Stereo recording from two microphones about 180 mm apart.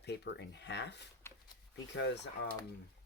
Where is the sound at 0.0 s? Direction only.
70° left (ahead or behind).